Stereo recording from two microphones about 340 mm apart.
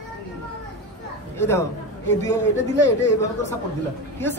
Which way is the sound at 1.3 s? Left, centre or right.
Centre.